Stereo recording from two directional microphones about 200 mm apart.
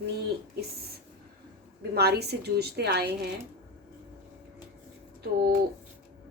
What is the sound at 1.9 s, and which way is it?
A woman's voice, 55° right (ahead or behind).